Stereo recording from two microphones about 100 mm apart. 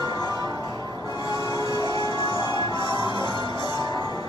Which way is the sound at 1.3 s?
40° left (ahead or behind).